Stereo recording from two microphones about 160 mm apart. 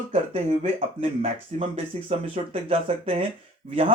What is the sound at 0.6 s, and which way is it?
Speech, 40° right (ahead or behind).